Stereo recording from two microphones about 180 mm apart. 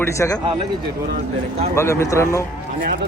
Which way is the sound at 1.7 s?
15° left (ahead or behind).